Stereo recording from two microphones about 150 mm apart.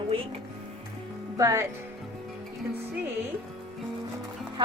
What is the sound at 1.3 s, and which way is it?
Speech, 20° right (ahead or behind).